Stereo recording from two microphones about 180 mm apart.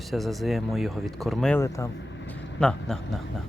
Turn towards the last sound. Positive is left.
turn(degrees=5)  # may be behind; listen again after turning